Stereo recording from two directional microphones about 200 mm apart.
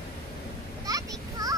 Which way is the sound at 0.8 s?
15° right (ahead or behind).